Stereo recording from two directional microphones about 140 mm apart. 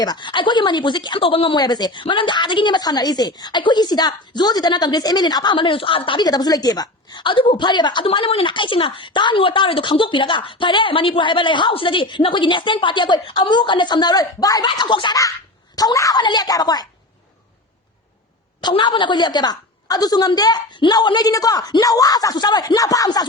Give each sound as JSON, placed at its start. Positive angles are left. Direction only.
{"t": 0.0, "sound": "a woman's voice", "side_deg": 30}
{"t": 18.6, "sound": "a woman's voice", "side_deg": 35}